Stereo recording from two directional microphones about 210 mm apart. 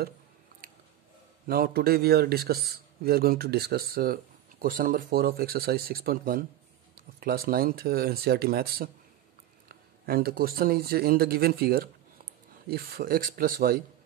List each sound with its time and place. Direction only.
0.6 s biting: 40° right (ahead or behind)
1.5 s a man's voice: 45° right (ahead or behind)